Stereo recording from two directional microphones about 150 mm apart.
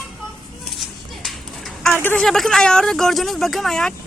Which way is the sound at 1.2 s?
Centre (ahead or behind).